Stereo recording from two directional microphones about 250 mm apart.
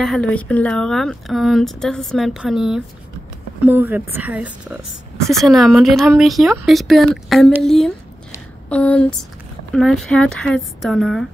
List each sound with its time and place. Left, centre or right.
0.0 s a woman's voice: centre